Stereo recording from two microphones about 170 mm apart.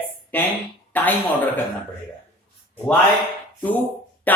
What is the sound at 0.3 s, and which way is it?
Speech, 10° left (ahead or behind).